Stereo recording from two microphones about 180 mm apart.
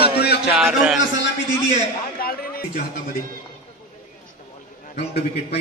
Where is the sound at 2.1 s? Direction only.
55° left (ahead or behind).